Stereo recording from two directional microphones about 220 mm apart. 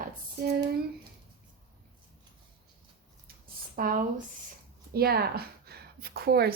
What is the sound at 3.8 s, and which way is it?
Speech, 45° right (ahead or behind).